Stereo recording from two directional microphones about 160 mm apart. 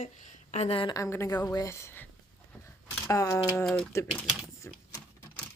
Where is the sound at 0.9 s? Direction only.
20° left (ahead or behind).